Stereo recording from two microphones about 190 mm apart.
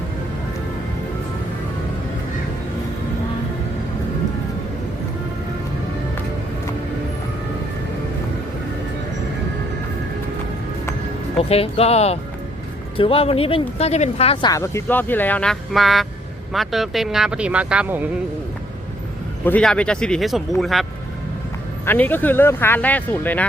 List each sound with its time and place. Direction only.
11.4 s speech: 30° left (ahead or behind)
14.5 s speech: 15° left (ahead or behind); by 18.1 s 10° right (ahead or behind)
19.5 s speech: 5° left (ahead or behind)
21.8 s speech: 10° left (ahead or behind)